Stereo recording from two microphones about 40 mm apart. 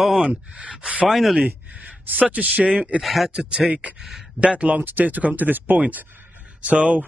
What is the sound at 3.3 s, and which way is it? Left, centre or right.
Speech, right.